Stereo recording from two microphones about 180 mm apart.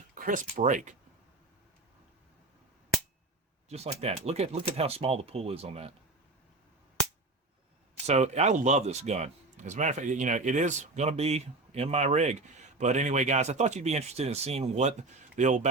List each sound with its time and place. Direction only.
0.1 s speech: 50° right (ahead or behind)
3.7 s speech: 35° right (ahead or behind)
8.0 s speech: 40° right (ahead or behind)